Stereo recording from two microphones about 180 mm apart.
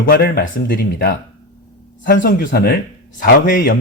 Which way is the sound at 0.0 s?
55° left (ahead or behind).